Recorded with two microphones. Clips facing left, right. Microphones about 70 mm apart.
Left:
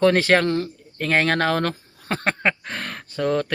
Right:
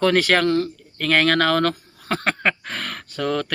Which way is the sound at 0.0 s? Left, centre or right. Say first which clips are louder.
Left 1 dB; left.